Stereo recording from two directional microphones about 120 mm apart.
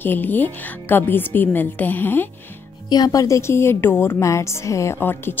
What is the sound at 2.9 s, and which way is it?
A woman's voice, 30° left (ahead or behind).